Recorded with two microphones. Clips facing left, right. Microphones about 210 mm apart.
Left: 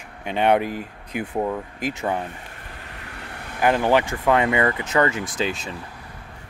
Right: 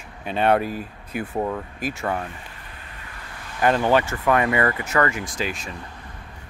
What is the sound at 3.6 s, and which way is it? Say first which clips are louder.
Speech: even; 15° left (ahead or behind).